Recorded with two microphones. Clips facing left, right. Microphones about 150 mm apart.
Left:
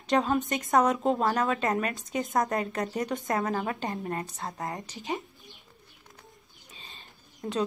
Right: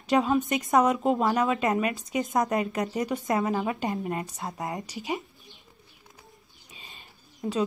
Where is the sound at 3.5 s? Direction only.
5° right (ahead or behind).